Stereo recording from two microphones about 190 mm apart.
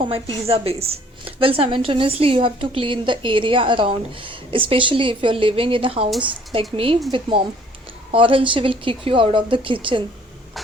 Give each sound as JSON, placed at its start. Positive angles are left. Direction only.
{"t": 0.0, "sound": "a woman's voice", "side_deg": -25}